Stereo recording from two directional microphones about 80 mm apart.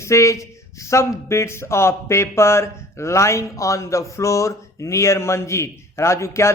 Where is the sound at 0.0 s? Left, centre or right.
Left.